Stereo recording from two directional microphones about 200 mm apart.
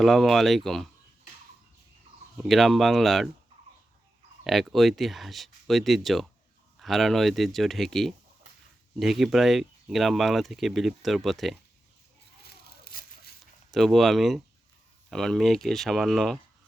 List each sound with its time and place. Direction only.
0.0 s speech: centre (ahead or behind)
2.4 s speech: centre (ahead or behind)
4.4 s speech: centre (ahead or behind)
12.4 s tearing: 50° left (ahead or behind)
13.7 s speech: centre (ahead or behind)